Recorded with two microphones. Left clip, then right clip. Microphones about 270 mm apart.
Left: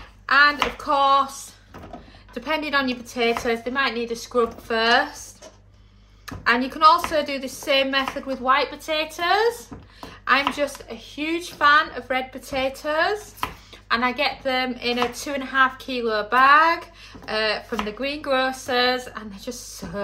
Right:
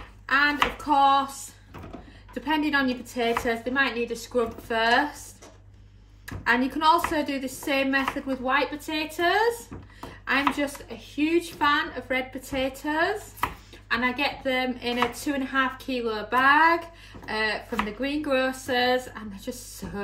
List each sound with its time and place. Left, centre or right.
0.3 s speech: left
2.3 s a woman's voice: left
6.2 s a woman's voice: left